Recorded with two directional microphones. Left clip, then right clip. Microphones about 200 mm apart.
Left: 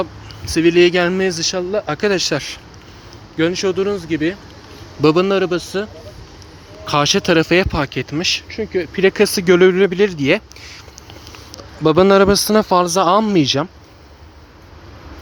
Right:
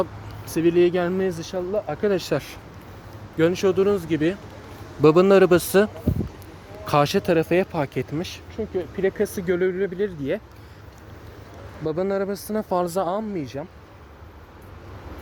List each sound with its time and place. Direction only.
0.5 s speech: 10° left (ahead or behind)
5.3 s a man's voice: 15° right (ahead or behind)
6.8 s speech: 5° right (ahead or behind)
8.4 s speech: 30° left (ahead or behind)
11.9 s a man's voice: 25° left (ahead or behind)
12.6 s speech: 10° left (ahead or behind)
13.2 s speech: 30° left (ahead or behind)